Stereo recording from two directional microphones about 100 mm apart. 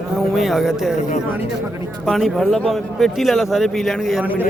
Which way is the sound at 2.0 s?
Centre (ahead or behind).